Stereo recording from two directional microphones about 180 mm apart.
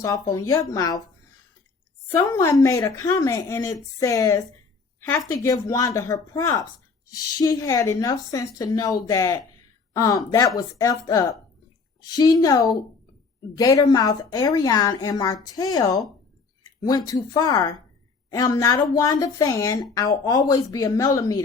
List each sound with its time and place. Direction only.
0.0 s a woman's voice: 15° left (ahead or behind)
2.1 s speech: 15° left (ahead or behind)
4.9 s a sound: 10° left (ahead or behind)
5.3 s a woman's voice: 15° left (ahead or behind)